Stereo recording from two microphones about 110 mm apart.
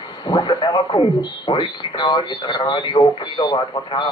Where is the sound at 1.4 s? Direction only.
45° left (ahead or behind).